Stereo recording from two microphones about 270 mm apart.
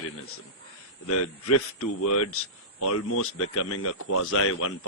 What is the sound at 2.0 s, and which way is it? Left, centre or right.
A man's voice, left.